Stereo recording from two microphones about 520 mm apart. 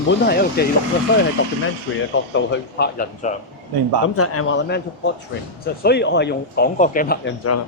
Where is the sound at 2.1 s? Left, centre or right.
Left.